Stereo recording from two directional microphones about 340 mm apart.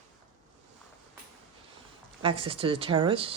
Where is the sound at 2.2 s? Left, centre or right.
Centre.